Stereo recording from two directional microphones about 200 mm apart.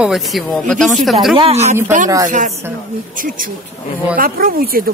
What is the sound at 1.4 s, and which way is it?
Speech, 30° right (ahead or behind).